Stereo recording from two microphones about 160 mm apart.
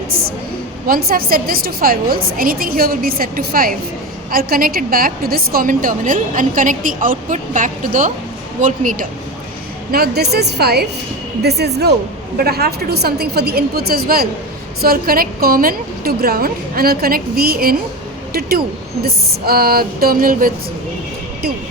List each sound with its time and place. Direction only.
0.1 s a woman's voice: 70° right (ahead or behind)
9.9 s a woman's voice: 85° right
12.4 s a woman's voice: 75° right (ahead or behind)